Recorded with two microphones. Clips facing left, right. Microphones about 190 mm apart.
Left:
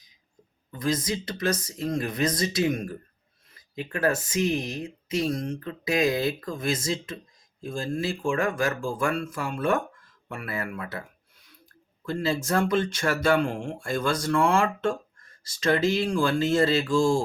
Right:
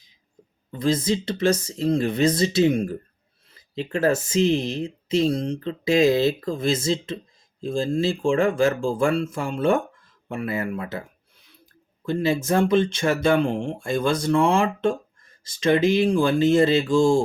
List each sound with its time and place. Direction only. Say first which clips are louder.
0.7 s speech: right 5 dB; 30° right (ahead or behind)
12.0 s speech: right 5 dB; 20° right (ahead or behind)